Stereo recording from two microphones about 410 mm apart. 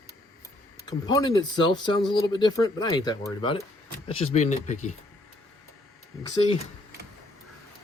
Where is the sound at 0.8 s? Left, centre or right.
Centre.